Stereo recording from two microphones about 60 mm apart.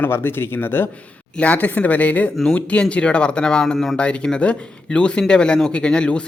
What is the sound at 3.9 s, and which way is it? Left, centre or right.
Speech, centre.